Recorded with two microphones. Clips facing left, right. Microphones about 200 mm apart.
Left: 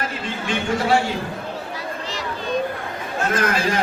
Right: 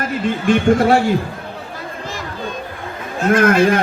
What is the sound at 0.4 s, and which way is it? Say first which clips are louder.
Speech: right 9 dB; 50° right (ahead or behind).